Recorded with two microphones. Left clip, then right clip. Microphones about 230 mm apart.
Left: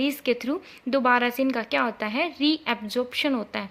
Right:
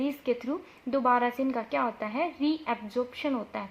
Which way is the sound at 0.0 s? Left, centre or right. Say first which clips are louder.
Left 5 dB; left.